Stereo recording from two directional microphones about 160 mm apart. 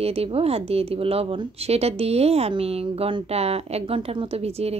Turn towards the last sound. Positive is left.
turn(degrees=-40)  # may be behind; listen again after turning